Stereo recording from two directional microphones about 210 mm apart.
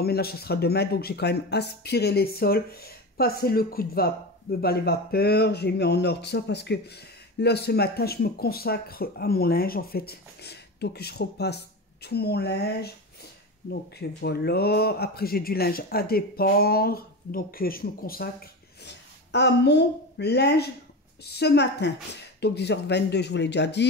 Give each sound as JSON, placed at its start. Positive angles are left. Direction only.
{"t": 0.0, "sound": "speech", "side_deg": 50}